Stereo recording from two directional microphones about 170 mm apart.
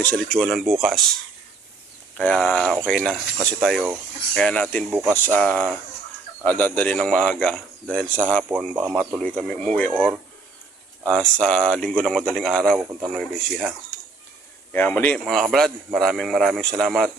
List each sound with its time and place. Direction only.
0.0 s speech: 5° left (ahead or behind)
2.1 s a man's voice: 5° left (ahead or behind)
4.9 s speech: 10° right (ahead or behind)
5.2 s a man's voice: 10° left (ahead or behind)
14.7 s a man's voice: 10° left (ahead or behind)